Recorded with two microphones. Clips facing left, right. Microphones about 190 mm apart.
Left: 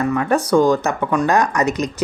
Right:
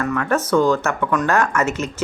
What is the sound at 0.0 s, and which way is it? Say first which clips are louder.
Speech: left 3 dB; 20° left (ahead or behind).